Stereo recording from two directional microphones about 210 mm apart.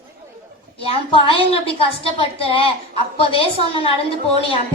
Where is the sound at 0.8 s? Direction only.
25° left (ahead or behind).